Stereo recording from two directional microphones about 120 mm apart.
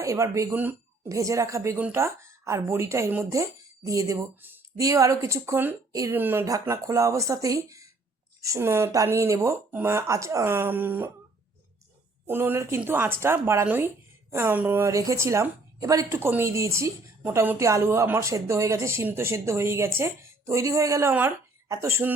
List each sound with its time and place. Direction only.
0.0 s speech: 25° right (ahead or behind)
0.5 s speech: 15° right (ahead or behind)
1.0 s speech: 25° right (ahead or behind)
6.1 s speech: 15° right (ahead or behind)
6.4 s speech: 25° right (ahead or behind)
12.2 s speech: 15° right (ahead or behind)
21.1 s speech: 15° right (ahead or behind)